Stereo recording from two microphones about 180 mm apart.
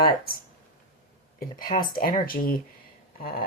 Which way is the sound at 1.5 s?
50° left (ahead or behind).